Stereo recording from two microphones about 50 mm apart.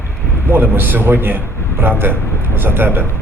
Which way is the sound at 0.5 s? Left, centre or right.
Right.